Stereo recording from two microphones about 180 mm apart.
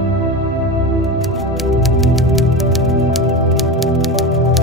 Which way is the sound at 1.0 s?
Centre (ahead or behind).